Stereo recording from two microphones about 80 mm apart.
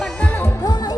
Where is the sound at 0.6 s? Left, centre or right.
Left.